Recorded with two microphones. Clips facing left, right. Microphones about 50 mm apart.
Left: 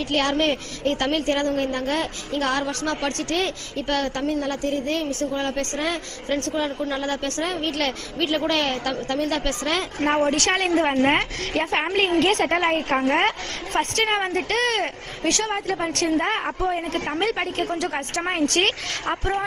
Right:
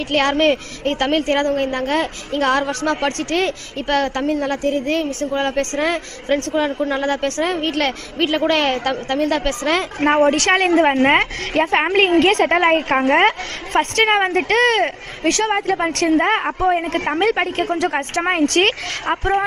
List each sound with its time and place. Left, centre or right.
0.0 s a woman's voice: right